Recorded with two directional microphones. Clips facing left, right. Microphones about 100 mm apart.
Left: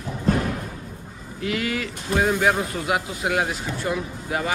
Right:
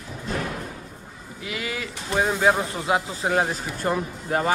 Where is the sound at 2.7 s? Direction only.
25° right (ahead or behind).